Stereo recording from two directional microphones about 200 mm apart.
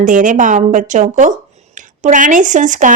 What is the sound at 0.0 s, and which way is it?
Speech, 40° right (ahead or behind).